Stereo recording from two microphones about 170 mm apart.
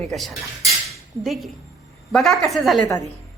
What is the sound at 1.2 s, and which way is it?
A woman's voice, centre (ahead or behind).